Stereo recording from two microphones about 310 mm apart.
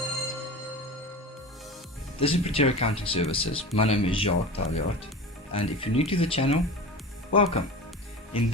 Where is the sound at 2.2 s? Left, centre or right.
Centre.